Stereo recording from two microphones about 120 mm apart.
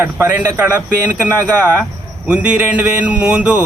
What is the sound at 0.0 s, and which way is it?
Speech, 15° right (ahead or behind).